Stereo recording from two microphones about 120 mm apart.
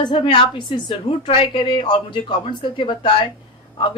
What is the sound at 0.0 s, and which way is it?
A woman's voice, 45° left (ahead or behind).